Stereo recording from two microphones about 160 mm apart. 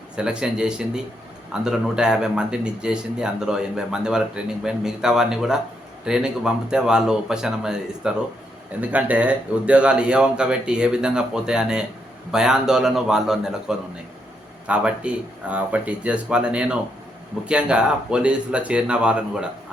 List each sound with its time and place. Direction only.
0.2 s speech: 5° right (ahead or behind)